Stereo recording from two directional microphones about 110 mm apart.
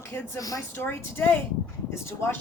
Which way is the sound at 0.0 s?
30° left (ahead or behind).